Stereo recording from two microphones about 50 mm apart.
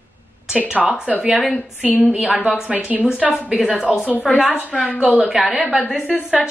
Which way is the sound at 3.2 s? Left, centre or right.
Right.